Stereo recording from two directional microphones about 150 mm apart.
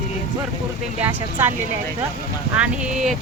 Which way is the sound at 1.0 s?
15° right (ahead or behind).